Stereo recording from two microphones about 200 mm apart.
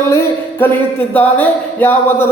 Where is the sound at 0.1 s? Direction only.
10° left (ahead or behind).